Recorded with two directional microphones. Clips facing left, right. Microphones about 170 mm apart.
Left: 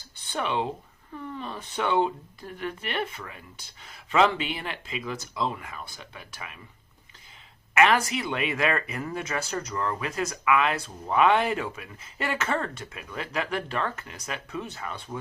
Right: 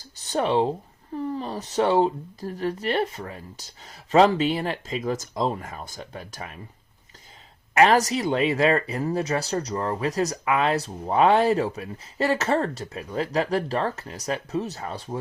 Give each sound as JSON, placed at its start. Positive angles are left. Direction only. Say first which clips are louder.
{"t": 0.2, "sound": "speech", "louder": "right 6 dB", "side_deg": -40}
{"t": 7.7, "sound": "speech", "louder": "right 4 dB", "side_deg": -35}